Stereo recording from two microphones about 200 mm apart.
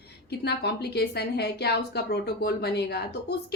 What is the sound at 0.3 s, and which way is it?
A woman's voice, 55° left (ahead or behind).